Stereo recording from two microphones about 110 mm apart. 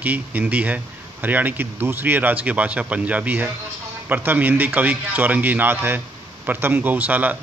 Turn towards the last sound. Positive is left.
turn(degrees=-15)  # may be behind; listen again after turning